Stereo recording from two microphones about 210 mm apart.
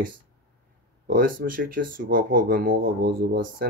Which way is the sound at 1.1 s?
40° right (ahead or behind).